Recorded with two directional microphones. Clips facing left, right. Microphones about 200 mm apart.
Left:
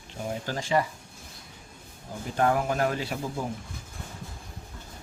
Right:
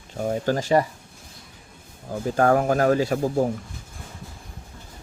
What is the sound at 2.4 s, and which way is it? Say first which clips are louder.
Speech: right 5 dB; 45° right (ahead or behind).